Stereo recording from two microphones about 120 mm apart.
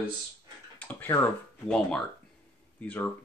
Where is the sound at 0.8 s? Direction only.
15° left (ahead or behind).